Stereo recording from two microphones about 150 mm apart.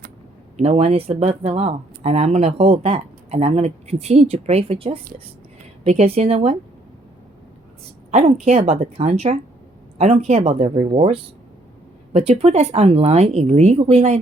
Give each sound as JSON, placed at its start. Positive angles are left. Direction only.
{"t": 0.5, "sound": "speech", "side_deg": -45}
{"t": 8.1, "sound": "speech", "side_deg": -45}